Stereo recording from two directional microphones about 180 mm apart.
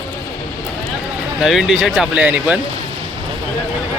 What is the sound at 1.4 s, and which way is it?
Speech, centre (ahead or behind).